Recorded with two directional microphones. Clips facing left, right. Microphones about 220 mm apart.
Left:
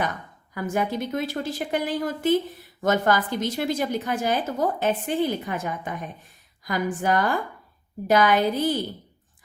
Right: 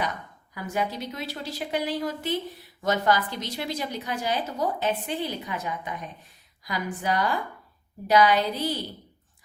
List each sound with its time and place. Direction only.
0.5 s a woman's voice: 50° left (ahead or behind)